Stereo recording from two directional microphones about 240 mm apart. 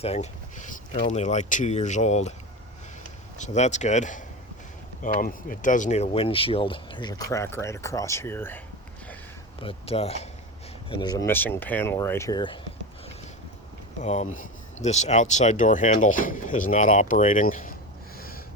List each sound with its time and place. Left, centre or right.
0.0 s speech: left
3.3 s speech: left; by 8.6 s centre
9.6 s speech: left
14.0 s speech: left